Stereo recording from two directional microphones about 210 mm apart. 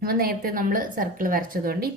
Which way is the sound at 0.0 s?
45° right (ahead or behind).